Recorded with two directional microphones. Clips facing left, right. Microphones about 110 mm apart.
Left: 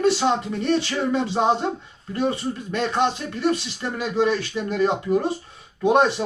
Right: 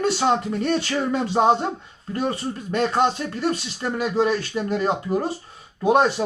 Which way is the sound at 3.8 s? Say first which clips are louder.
Right 1 dB; 40° right (ahead or behind).